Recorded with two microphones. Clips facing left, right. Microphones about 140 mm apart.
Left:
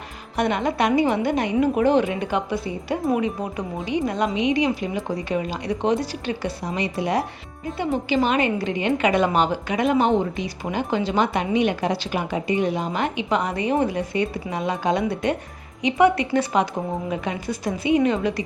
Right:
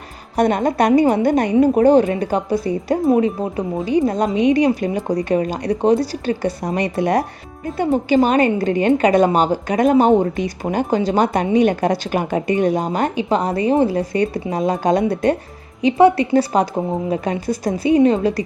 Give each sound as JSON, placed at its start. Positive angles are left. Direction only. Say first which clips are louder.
{"t": 0.3, "sound": "speech", "louder": "right 6 dB", "side_deg": -40}